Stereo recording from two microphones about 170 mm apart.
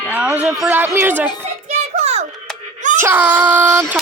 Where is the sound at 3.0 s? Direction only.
10° right (ahead or behind).